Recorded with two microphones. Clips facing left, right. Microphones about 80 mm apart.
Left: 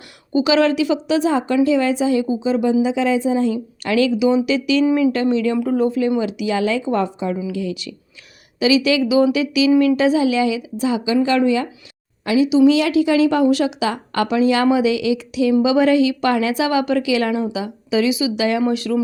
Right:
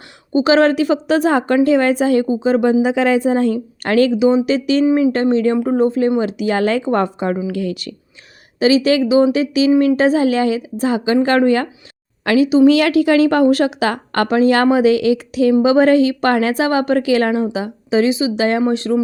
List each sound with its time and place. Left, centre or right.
0.3 s speech: right
4.9 s speech: right
5.1 s speech: right